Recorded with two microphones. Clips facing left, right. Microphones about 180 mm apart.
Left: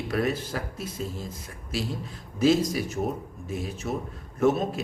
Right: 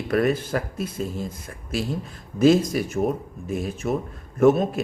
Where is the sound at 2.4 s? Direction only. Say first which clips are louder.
Right 4 dB; 50° right (ahead or behind).